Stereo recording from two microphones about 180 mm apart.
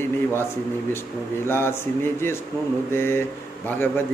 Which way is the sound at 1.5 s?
15° left (ahead or behind).